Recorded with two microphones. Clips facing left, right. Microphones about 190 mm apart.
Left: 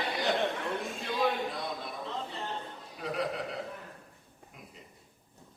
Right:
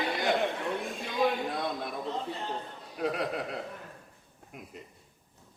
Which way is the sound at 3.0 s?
55° right (ahead or behind).